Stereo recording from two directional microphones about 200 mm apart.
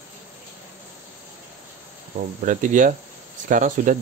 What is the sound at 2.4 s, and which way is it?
Speech, 40° right (ahead or behind).